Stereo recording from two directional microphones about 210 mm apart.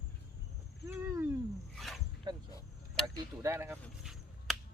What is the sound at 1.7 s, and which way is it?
Speech, centre (ahead or behind).